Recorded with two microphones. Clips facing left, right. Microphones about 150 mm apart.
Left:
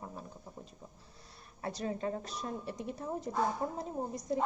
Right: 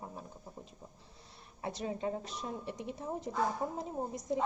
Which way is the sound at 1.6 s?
15° right (ahead or behind).